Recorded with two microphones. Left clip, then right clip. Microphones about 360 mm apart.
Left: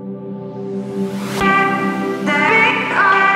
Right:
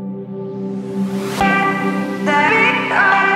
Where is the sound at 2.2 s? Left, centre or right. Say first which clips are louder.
Even; right.